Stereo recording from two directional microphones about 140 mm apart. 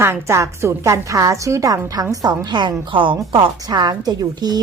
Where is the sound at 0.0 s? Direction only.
20° right (ahead or behind).